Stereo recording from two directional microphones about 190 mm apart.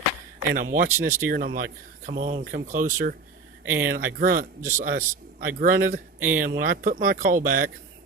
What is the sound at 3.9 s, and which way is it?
Speech, 45° right (ahead or behind).